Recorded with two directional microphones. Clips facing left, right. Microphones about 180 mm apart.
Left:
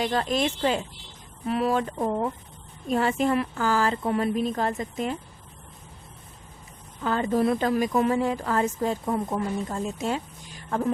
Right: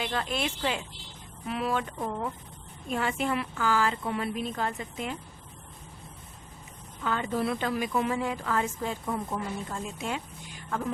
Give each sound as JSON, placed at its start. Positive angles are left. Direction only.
{"t": 0.0, "sound": "a woman's voice", "side_deg": 40}
{"t": 7.0, "sound": "a woman's voice", "side_deg": 40}